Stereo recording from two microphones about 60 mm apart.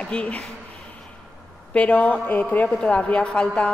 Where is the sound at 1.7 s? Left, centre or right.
Left.